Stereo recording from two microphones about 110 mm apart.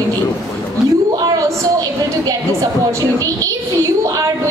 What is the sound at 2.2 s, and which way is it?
A woman's voice, 30° right (ahead or behind).